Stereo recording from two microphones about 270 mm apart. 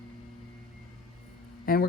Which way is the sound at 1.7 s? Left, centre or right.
Left.